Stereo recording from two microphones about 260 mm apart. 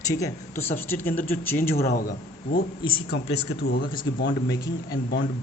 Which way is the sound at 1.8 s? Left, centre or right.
Left.